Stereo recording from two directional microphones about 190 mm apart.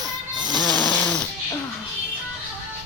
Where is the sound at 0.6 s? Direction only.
Centre (ahead or behind).